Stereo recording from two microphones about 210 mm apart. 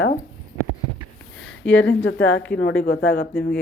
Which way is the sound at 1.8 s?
60° left (ahead or behind).